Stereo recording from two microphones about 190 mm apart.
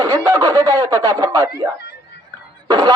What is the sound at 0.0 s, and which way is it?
Speech, 15° right (ahead or behind).